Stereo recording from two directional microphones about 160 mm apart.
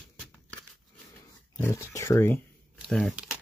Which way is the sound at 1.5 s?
20° left (ahead or behind).